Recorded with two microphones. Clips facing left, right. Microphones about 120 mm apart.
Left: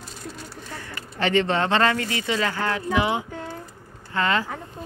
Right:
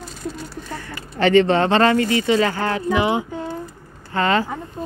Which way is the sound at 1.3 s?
45° right (ahead or behind).